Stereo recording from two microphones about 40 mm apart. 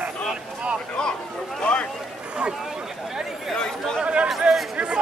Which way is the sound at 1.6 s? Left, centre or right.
Left.